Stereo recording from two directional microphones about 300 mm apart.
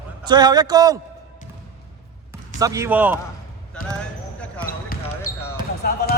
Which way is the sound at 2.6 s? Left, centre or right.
Centre.